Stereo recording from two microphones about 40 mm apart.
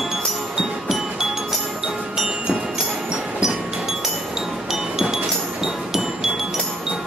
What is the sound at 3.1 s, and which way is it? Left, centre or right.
Music, right.